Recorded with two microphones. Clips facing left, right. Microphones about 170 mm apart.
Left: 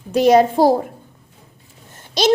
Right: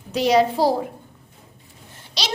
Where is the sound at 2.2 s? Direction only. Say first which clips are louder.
Left 14 dB; 50° left (ahead or behind).